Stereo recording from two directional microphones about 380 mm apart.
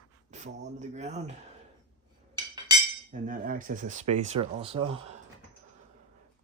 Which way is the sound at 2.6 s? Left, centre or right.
Centre.